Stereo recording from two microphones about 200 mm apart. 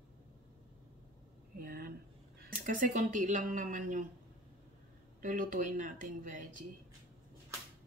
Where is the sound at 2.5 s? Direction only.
40° right (ahead or behind).